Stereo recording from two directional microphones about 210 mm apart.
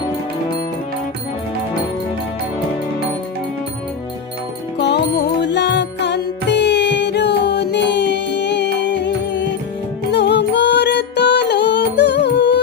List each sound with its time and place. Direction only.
4.8 s music: 55° left (ahead or behind)